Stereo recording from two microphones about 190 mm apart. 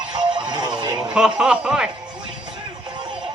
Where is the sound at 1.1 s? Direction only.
5° right (ahead or behind).